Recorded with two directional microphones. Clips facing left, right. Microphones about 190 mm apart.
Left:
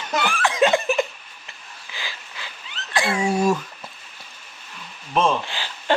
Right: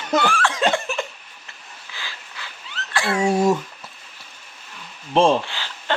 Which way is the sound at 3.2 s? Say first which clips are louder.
Right 3 dB; 25° right (ahead or behind).